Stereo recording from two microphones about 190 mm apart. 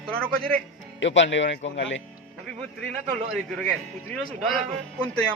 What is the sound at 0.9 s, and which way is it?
Speech, 75° left (ahead or behind).